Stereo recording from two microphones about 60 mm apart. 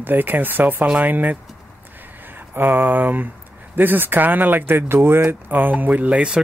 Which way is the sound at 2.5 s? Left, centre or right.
Right.